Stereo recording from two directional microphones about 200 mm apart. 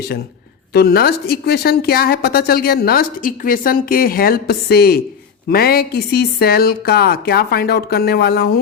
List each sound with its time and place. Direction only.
0.7 s a woman's voice: 55° left (ahead or behind)